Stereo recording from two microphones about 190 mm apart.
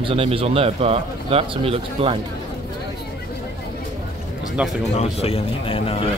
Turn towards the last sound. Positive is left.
turn(degrees=30)  # may be behind; listen again after turning